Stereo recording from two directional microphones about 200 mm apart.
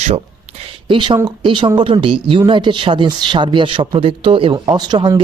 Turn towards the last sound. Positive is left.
turn(degrees=-25)  # may be behind; listen again after turning